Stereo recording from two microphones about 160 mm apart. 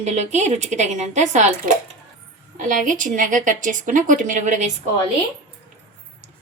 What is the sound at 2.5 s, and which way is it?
A woman's voice, 55° right (ahead or behind).